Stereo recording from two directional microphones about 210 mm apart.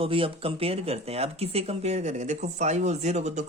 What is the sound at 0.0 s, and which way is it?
Speech, 25° right (ahead or behind).